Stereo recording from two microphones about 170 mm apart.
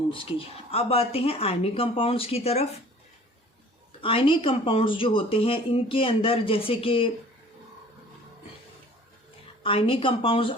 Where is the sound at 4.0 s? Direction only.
30° left (ahead or behind).